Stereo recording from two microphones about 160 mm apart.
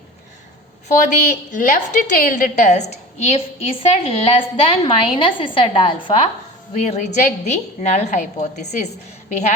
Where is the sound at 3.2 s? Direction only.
35° left (ahead or behind).